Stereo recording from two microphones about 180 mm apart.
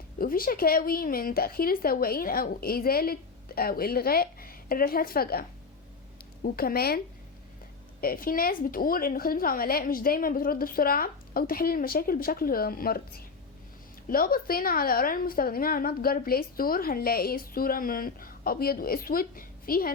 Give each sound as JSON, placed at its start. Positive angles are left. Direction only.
{"t": 0.2, "sound": "a woman's voice", "side_deg": 55}
{"t": 8.0, "sound": "a woman's voice", "side_deg": 55}